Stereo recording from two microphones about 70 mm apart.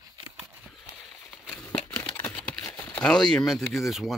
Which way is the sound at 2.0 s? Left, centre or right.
Left.